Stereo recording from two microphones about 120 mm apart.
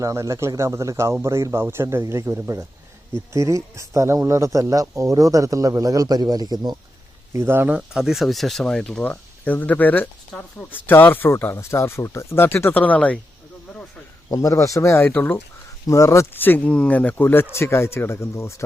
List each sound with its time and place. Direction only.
0.0 s speech: 25° right (ahead or behind)
7.3 s speech: 20° right (ahead or behind)
7.8 s speech: 5° right (ahead or behind); by 13.1 s 10° left (ahead or behind)
14.3 s speech: 30° left (ahead or behind)